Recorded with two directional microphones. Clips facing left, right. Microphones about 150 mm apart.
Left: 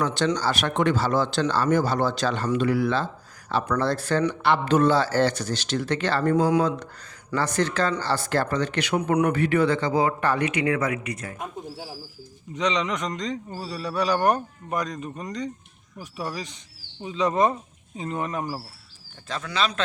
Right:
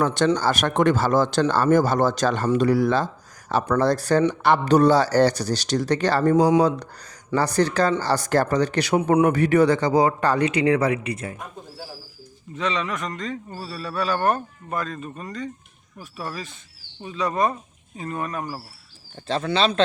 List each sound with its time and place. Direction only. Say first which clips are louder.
0.0 s a man's voice: right 4 dB; 45° right (ahead or behind); by 9.2 s 30° right (ahead or behind)
9.2 s a man's voice: right 4 dB; 40° right (ahead or behind)
12.5 s speech: left 1 dB; 15° left (ahead or behind)
19.3 s speech: right 6 dB; 30° right (ahead or behind)